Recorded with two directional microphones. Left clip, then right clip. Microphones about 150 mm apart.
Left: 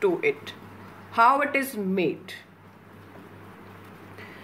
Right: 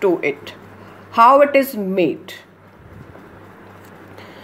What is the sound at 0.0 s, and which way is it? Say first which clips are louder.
Speech: right 6 dB; 40° right (ahead or behind).